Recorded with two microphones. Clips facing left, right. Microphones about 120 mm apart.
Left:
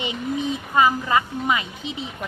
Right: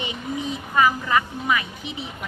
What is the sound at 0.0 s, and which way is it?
A woman's voice, 20° left (ahead or behind).